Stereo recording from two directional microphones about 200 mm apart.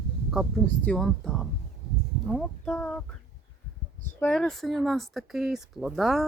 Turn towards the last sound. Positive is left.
turn(degrees=0)  # may be behind; listen again after turning